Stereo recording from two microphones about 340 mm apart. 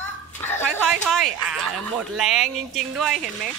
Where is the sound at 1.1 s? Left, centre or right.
Centre.